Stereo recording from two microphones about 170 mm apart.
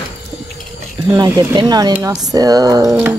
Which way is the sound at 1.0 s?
20° right (ahead or behind).